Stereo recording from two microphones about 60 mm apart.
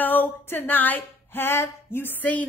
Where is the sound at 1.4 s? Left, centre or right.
Left.